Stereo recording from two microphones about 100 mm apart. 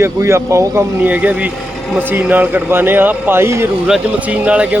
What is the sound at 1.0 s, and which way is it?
A man's voice, 15° right (ahead or behind).